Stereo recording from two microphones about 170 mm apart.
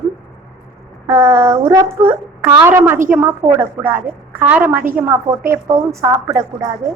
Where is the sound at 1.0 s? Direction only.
15° right (ahead or behind).